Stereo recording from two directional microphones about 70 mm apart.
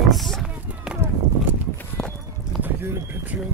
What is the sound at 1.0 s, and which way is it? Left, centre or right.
Run, right.